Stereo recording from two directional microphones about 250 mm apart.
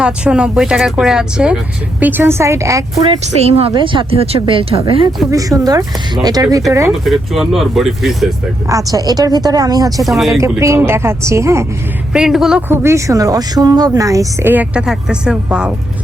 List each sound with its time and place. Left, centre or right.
0.0 s speech: centre
3.0 s speech: right
7.0 s speech: centre
8.7 s speech: centre
10.0 s speech: centre
10.4 s speech: centre